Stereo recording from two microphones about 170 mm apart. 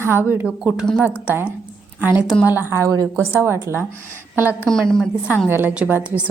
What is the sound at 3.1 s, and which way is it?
Speech, 10° left (ahead or behind).